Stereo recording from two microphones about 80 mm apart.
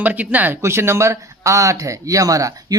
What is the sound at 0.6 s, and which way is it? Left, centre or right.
Speech, right.